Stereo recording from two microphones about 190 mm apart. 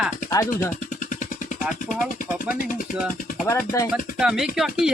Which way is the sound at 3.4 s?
15° left (ahead or behind).